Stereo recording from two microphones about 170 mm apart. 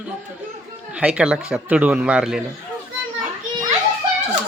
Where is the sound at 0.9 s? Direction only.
5° right (ahead or behind).